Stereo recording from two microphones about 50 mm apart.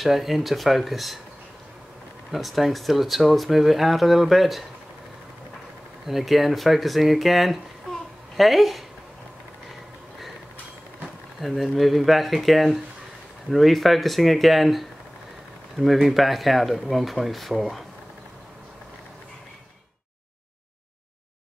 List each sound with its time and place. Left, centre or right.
0.0 s speech: centre
2.3 s speech: centre
6.0 s speech: centre
11.4 s speech: centre